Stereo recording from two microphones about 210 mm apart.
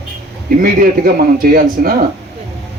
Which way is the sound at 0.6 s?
45° right (ahead or behind).